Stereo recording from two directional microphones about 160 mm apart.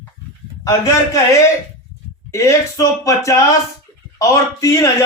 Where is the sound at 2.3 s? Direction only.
20° left (ahead or behind).